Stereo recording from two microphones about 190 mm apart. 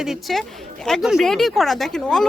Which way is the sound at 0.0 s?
Centre (ahead or behind).